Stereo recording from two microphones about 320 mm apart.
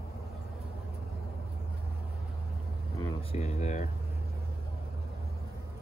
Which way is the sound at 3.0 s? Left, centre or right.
Centre.